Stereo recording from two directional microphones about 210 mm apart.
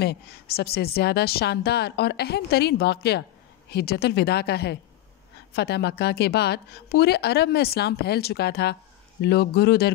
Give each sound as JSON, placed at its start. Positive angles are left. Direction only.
{"t": 0.0, "sound": "speech", "side_deg": 50}